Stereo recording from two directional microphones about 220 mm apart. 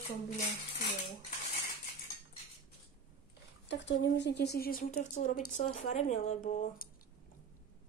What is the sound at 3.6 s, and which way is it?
Speech, 55° left (ahead or behind).